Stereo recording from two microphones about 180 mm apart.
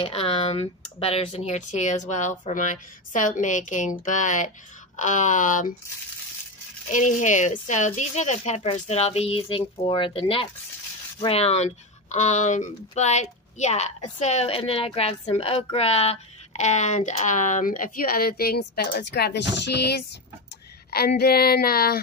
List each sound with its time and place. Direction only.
0.0 s speech: 30° left (ahead or behind)
6.9 s speech: 45° left (ahead or behind)